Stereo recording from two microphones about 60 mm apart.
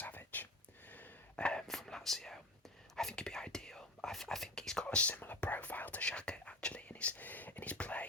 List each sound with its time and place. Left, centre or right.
0.0 s whispering: left
0.9 s a sound: left
1.5 s whispering: centre